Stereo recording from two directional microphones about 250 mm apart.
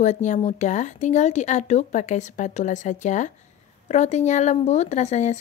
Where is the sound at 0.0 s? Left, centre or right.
Left.